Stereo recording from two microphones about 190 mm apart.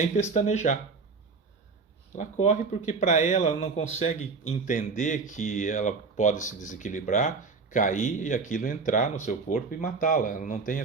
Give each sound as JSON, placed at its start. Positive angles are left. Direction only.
{"t": 0.0, "sound": "speech", "side_deg": 35}
{"t": 2.1, "sound": "speech", "side_deg": 40}